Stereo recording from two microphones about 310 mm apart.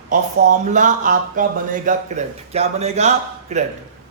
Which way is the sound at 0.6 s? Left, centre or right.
Right.